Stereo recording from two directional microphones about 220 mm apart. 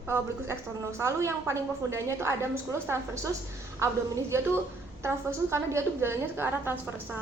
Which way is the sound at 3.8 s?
15° right (ahead or behind).